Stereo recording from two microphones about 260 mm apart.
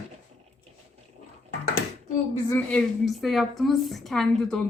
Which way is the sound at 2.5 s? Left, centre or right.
Centre.